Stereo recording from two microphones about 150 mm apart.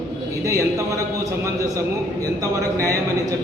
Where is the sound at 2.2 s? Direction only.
20° right (ahead or behind).